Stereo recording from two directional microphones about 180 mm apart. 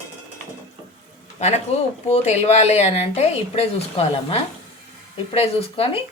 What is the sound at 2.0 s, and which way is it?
Speech, 35° left (ahead or behind).